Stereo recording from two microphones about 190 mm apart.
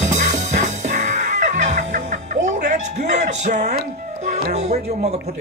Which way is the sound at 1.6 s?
40° right (ahead or behind).